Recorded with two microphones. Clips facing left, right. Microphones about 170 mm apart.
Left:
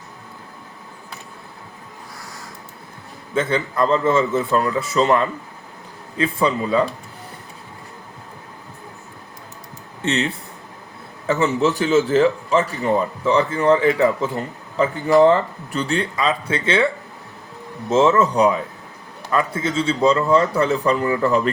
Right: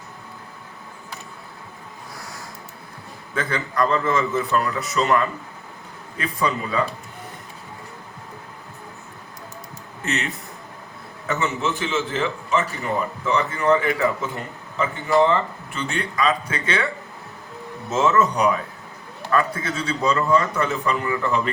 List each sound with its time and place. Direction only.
3.3 s a man's voice: 25° left (ahead or behind)
10.0 s a man's voice: 30° left (ahead or behind)
17.8 s a man's voice: 30° left (ahead or behind)